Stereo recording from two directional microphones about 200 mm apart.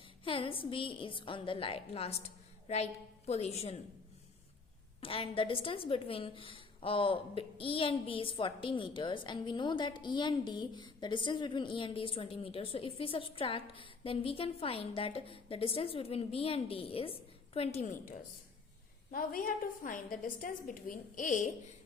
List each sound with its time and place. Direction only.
0.3 s a woman's voice: 25° left (ahead or behind)
4.9 s a woman's voice: 25° left (ahead or behind)